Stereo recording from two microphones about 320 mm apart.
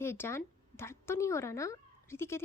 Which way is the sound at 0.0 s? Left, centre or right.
Centre.